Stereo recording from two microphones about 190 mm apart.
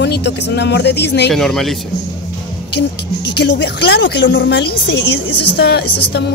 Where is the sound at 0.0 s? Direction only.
65° left (ahead or behind).